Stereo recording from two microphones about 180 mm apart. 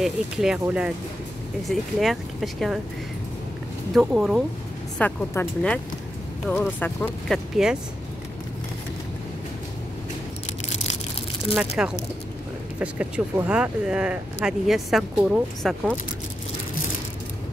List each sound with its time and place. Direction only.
0.0 s speech: 5° right (ahead or behind)
3.9 s speech: centre (ahead or behind)
4.9 s speech: 10° left (ahead or behind)
10.7 s a sound: 40° left (ahead or behind)
11.8 s speech: 5° right (ahead or behind)